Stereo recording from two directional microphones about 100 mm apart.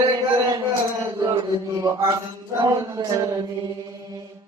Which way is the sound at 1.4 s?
40° right (ahead or behind).